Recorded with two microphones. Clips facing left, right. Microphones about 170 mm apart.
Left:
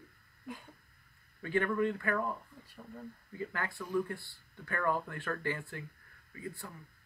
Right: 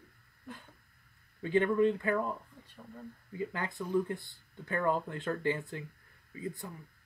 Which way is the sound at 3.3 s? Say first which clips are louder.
Right 3 dB; 20° right (ahead or behind).